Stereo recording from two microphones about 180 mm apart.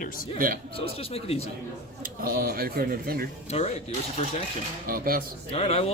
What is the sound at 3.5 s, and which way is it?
Speech, 35° left (ahead or behind).